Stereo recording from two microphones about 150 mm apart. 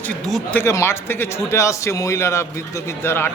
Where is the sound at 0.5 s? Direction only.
20° left (ahead or behind).